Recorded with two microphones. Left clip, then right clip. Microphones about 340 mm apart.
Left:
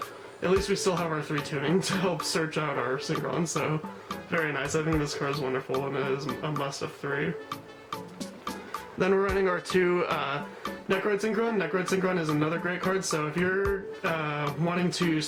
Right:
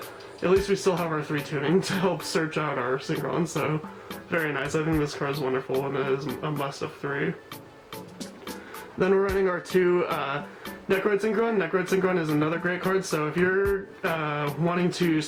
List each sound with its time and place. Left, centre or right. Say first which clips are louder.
0.4 s speech: right 3 dB; centre
9.0 s speech: right 2 dB; centre